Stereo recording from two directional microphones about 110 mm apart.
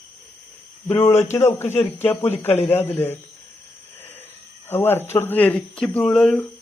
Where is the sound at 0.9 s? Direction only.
25° left (ahead or behind).